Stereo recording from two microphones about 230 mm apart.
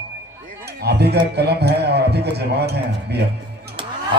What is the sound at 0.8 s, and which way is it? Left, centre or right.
A man's voice, right.